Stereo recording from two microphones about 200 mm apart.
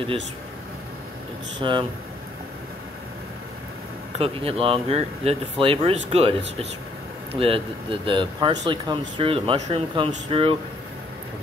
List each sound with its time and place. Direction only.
1.6 s speech: 25° right (ahead or behind)
4.2 s speech: 30° right (ahead or behind)